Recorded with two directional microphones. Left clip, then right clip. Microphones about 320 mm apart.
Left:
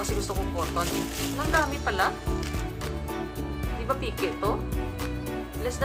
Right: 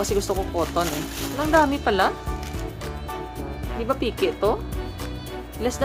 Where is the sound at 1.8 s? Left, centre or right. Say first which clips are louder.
Right 5 dB; right.